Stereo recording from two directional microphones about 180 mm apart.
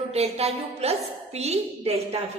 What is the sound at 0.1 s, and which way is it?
A woman's voice, 35° right (ahead or behind).